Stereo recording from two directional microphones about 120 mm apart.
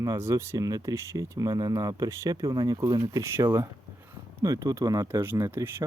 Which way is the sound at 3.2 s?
25° right (ahead or behind).